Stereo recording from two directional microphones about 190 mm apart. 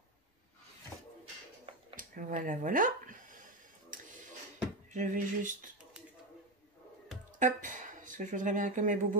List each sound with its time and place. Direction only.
2.0 s speech: 45° right (ahead or behind)
4.9 s a sound: 40° right (ahead or behind)
7.3 s speech: 40° right (ahead or behind)